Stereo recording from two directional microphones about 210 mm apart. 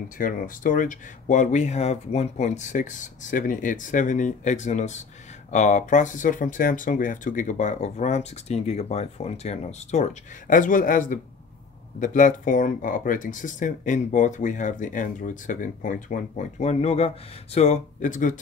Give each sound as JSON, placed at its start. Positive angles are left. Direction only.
{"t": 0.2, "sound": "speech", "side_deg": 40}